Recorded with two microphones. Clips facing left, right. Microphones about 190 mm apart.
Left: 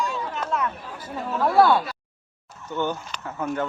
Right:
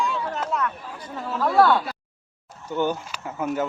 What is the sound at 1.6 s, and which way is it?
Speech, 10° left (ahead or behind).